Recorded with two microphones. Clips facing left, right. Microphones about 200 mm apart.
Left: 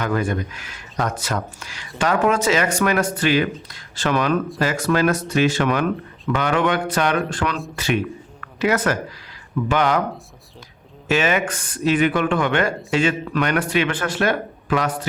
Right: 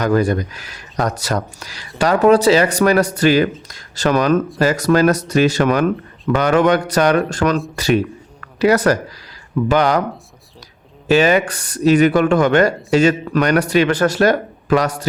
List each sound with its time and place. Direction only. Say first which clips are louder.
0.0 s speech: right 6 dB; 40° right (ahead or behind)
11.1 s speech: right 6 dB; 35° right (ahead or behind)